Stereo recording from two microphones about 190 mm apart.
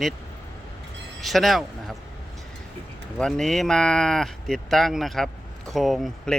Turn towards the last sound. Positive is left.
turn(degrees=0)  # may be behind; listen again after turning